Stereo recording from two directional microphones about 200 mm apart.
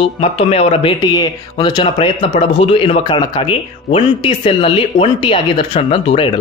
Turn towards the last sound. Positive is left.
turn(degrees=25)  # may be behind; listen again after turning